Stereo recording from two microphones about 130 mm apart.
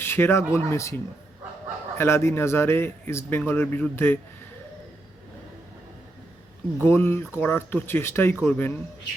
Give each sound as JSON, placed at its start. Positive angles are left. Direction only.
{"t": 0.0, "sound": "speech", "side_deg": 15}
{"t": 2.0, "sound": "a man's voice", "side_deg": 20}
{"t": 6.8, "sound": "a man's voice", "side_deg": 15}